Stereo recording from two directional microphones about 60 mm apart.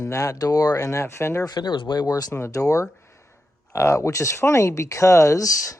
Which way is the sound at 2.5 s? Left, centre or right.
Left.